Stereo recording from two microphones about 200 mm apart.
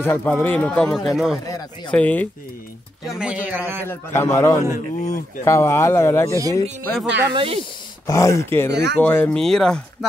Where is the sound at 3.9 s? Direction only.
10° left (ahead or behind).